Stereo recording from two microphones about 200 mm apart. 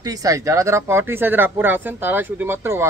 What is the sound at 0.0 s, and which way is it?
A man's voice, 15° right (ahead or behind).